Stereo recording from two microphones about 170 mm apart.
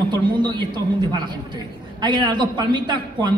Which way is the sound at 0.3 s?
25° right (ahead or behind).